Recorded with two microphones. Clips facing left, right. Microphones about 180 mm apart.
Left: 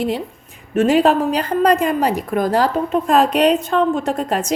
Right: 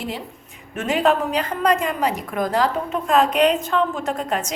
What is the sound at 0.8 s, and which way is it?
A woman's voice, 35° left (ahead or behind).